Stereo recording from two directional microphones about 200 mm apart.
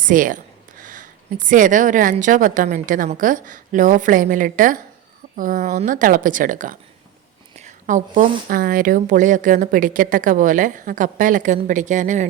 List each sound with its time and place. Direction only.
0.0 s a woman's voice: 40° right (ahead or behind)